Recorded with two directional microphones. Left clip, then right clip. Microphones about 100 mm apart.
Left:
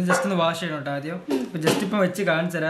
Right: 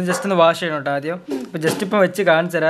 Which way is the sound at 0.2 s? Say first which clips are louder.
Right 8 dB; 20° right (ahead or behind).